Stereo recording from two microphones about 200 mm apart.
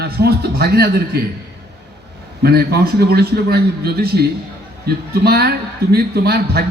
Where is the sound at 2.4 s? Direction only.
55° right (ahead or behind).